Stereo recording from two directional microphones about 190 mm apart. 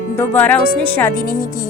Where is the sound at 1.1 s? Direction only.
50° left (ahead or behind).